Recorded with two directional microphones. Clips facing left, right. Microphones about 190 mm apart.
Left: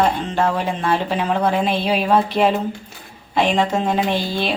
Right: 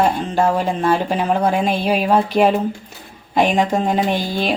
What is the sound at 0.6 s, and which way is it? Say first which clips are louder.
Speech: right 3 dB; 40° right (ahead or behind).